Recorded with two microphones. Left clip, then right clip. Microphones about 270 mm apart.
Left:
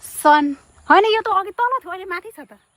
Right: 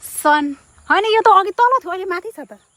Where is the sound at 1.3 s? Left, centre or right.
Right.